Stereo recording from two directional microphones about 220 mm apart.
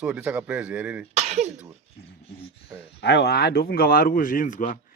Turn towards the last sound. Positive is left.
turn(degrees=35)  # may be behind; listen again after turning